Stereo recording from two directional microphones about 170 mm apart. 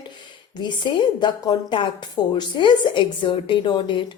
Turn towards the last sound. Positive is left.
turn(degrees=30)  # may be behind; listen again after turning